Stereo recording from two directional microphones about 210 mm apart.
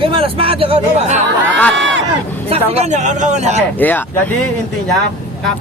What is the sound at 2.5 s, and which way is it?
Speech, 30° right (ahead or behind).